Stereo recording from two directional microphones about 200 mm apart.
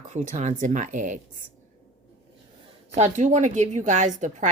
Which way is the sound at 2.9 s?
35° right (ahead or behind).